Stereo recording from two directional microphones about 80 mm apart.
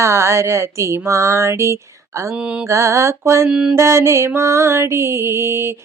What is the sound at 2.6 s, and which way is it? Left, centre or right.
Mantra, right.